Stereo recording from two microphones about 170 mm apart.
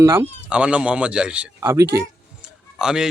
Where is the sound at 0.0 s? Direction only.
15° right (ahead or behind).